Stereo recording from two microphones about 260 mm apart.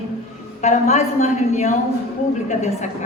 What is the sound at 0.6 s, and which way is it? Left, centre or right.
Speech, left.